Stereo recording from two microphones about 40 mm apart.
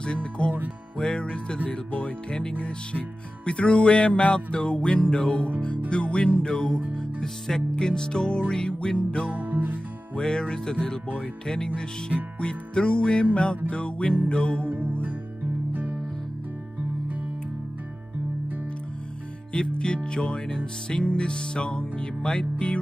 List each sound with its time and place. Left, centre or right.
0.0 s music: left
9.3 s music: right
10.1 s music: centre
14.7 s music: right
19.8 s music: left